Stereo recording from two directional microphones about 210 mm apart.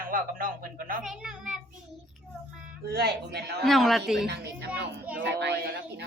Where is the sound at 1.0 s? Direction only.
Centre (ahead or behind).